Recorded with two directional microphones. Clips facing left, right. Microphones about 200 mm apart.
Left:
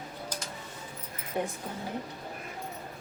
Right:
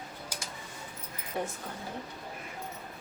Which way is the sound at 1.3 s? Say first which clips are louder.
Left 2 dB; 15° left (ahead or behind).